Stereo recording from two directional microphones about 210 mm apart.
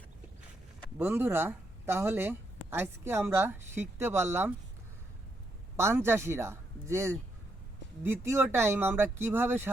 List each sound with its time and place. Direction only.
0.9 s speech: 10° right (ahead or behind)
5.7 s speech: 10° right (ahead or behind)